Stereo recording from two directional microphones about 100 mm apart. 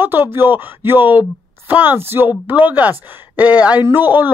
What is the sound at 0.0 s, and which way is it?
Speech, 20° right (ahead or behind).